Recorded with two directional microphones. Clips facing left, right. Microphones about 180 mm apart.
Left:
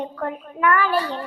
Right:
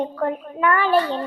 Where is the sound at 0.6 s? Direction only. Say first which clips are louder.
Right 2 dB; 25° right (ahead or behind).